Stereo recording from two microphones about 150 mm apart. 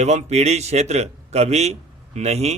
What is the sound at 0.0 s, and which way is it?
A man's voice, 50° right (ahead or behind).